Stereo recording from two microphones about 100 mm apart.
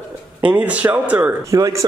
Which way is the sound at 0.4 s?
15° right (ahead or behind).